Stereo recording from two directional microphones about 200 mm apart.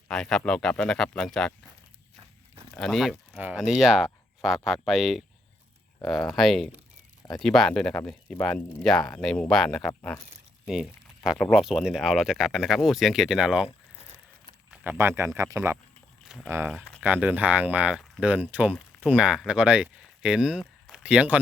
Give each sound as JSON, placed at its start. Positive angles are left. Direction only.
{"t": 0.1, "sound": "speech", "side_deg": 0}
{"t": 2.7, "sound": "speech", "side_deg": 0}
{"t": 6.2, "sound": "speech", "side_deg": 0}
{"t": 14.7, "sound": "speech", "side_deg": -10}
{"t": 16.2, "sound": "a sound", "side_deg": 0}
{"t": 16.5, "sound": "speech", "side_deg": -10}
{"t": 16.7, "sound": "speech", "side_deg": 5}
{"t": 17.0, "sound": "speech", "side_deg": -10}